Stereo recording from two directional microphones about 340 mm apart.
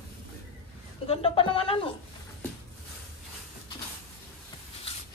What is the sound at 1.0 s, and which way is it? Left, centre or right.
Speech, centre.